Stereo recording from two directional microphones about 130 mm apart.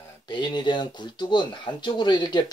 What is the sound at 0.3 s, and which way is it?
Speech, 35° left (ahead or behind).